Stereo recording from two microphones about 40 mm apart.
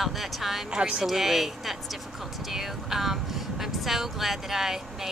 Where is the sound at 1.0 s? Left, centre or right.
Centre.